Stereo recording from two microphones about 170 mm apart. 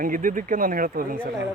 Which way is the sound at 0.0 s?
55° right (ahead or behind).